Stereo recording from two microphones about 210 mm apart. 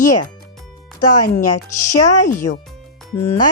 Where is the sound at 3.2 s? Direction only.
10° left (ahead or behind).